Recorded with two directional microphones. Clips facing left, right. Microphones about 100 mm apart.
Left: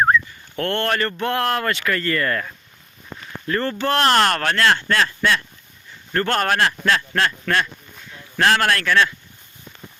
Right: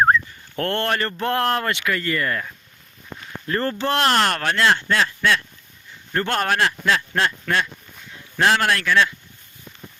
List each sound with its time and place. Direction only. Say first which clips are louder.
0.5 s speech: left 1 dB; 35° right (ahead or behind); by 2.5 s 10° right (ahead or behind)
3.4 s speech: left 1 dB; 30° right (ahead or behind)
4.0 s speech: left 3 dB; 5° right (ahead or behind)